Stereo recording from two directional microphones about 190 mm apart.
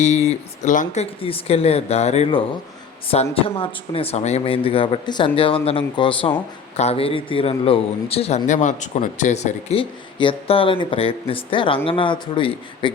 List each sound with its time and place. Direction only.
0.0 s speech: 35° left (ahead or behind)
1.2 s speech: 30° left (ahead or behind)
3.4 s a man's voice: 30° left (ahead or behind)